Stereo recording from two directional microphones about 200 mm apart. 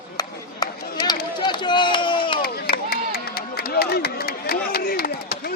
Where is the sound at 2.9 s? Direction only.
50° left (ahead or behind).